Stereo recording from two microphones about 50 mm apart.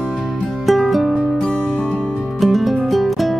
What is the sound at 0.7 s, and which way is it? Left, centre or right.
Music, centre.